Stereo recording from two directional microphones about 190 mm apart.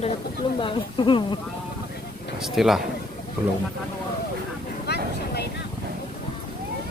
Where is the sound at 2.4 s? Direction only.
Centre (ahead or behind).